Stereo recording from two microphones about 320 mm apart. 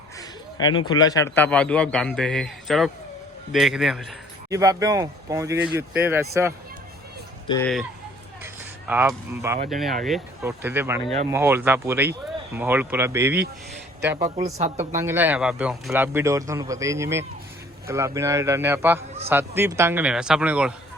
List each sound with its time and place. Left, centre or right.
0.2 s a man's voice: centre
7.4 s speech: centre
8.9 s a man's voice: centre
14.3 s a woman's voice: centre
14.8 s a man's voice: centre